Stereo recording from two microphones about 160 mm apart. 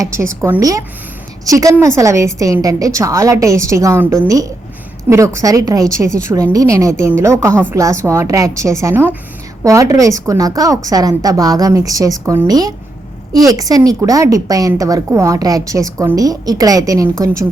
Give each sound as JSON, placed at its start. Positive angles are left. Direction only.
{"t": 0.0, "sound": "a woman's voice", "side_deg": -20}